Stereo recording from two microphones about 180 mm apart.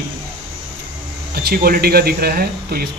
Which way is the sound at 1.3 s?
60° right (ahead or behind).